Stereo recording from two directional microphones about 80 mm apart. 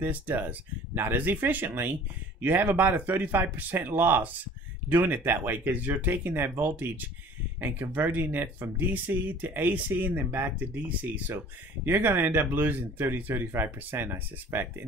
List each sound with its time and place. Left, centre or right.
0.0 s speech: right